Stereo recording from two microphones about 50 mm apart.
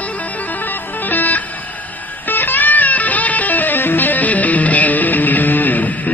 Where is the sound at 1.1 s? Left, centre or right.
Left.